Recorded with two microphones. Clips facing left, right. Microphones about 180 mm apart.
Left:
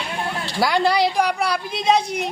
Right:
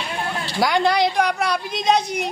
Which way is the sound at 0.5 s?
5° left (ahead or behind).